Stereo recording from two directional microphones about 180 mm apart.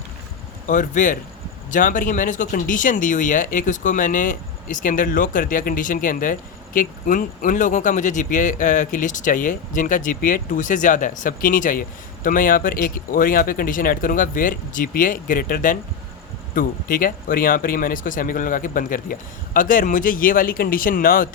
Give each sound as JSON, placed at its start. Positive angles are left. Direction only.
{"t": 0.7, "sound": "speech", "side_deg": 45}